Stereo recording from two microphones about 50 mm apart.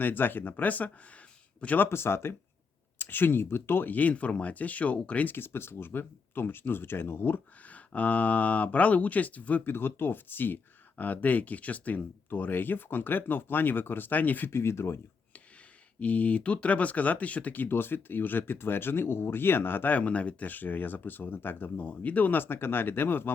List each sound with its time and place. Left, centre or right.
0.0 s speech: left
1.9 s speech: left
3.0 s speech: left
3.9 s speech: left
5.3 s speech: left
7.6 s speech: left
9.6 s speech: left
14.5 s speech: left
16.0 s speech: left